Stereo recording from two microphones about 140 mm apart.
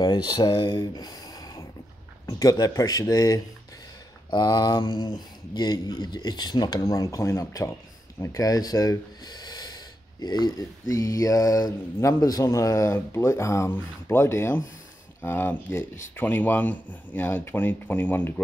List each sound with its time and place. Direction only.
0.0 s speech: 30° left (ahead or behind); by 18.3 s 15° left (ahead or behind)